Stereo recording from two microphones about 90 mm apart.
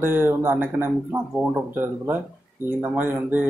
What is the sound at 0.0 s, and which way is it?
Speech, 25° right (ahead or behind).